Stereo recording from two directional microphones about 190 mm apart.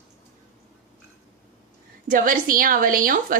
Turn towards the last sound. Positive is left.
turn(degrees=-45)  # may be behind; listen again after turning